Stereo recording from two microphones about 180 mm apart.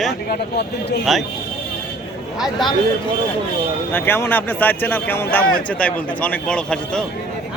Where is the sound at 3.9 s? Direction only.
10° left (ahead or behind).